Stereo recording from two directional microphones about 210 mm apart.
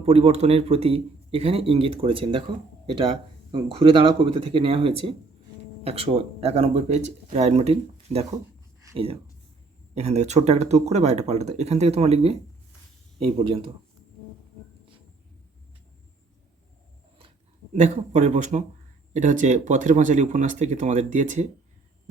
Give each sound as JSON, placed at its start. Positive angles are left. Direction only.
{"t": 0.0, "sound": "speech", "side_deg": -30}
{"t": 8.8, "sound": "a sound", "side_deg": -20}
{"t": 9.9, "sound": "speech", "side_deg": -30}
{"t": 17.2, "sound": "speech", "side_deg": -30}